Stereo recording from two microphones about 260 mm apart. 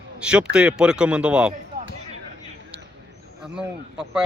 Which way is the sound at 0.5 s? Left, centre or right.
Centre.